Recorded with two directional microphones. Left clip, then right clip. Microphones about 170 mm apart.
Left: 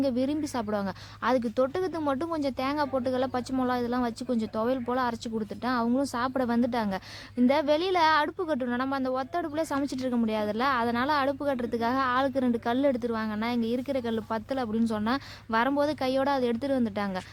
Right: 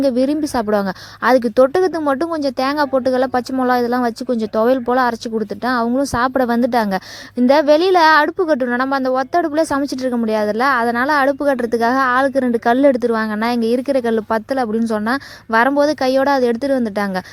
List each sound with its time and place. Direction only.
0.0 s a woman's voice: 45° right (ahead or behind)